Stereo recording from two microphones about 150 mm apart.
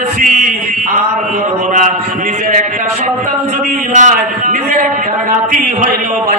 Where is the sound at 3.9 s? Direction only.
55° right (ahead or behind).